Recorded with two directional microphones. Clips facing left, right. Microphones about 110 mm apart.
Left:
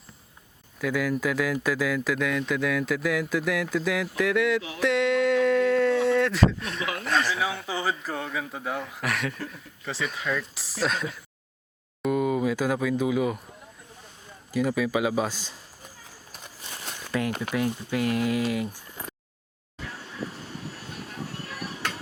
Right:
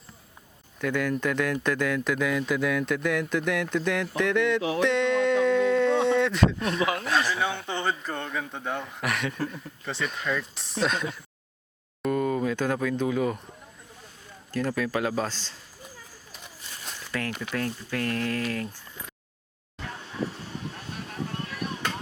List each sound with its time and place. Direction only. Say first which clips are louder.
0.8 s speech: even; 5° left (ahead or behind)
4.8 s a sound: left 2 dB; centre (ahead or behind)
7.0 s speech: even; centre (ahead or behind)
14.5 s speech: left 2 dB; 10° left (ahead or behind)
16.8 s zipper: left 4 dB; 10° left (ahead or behind)
17.5 s speech: left 2 dB; 10° left (ahead or behind)